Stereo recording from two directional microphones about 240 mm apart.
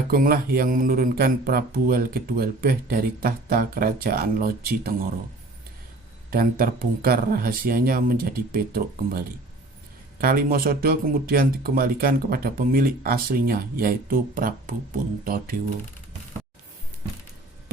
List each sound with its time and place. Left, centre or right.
0.1 s speech: right
6.3 s speech: right